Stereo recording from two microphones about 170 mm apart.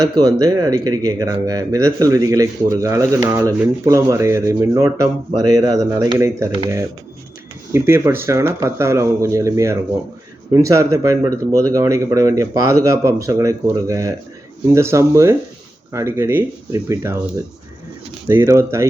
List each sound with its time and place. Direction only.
0.0 s speech: 25° right (ahead or behind)
7.7 s speech: 15° right (ahead or behind)
18.3 s speech: 15° right (ahead or behind)